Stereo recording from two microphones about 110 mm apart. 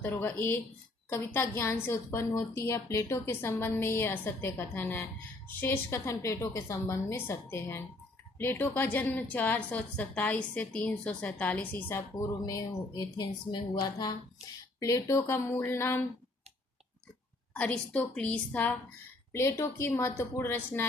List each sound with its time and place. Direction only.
0.0 s a woman's voice: 15° left (ahead or behind)
12.5 s a woman's voice: 35° left (ahead or behind)
17.5 s a woman's voice: 10° left (ahead or behind)